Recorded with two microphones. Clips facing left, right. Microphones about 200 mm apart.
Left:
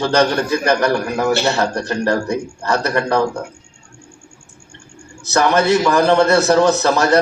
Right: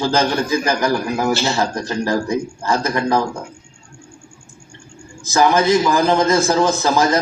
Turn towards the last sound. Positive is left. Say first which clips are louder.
# left 2 dB
turn(degrees=70)  # may be behind; listen again after turning